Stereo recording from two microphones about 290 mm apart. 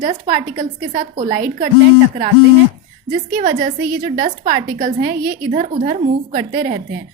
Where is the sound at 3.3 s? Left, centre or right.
Right.